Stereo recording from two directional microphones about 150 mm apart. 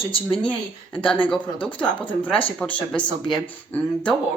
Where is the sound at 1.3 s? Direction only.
5° left (ahead or behind).